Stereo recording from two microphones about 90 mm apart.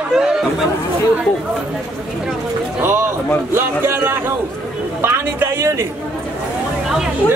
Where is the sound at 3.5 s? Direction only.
25° right (ahead or behind).